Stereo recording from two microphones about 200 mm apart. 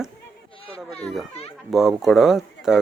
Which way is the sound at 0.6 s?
30° left (ahead or behind).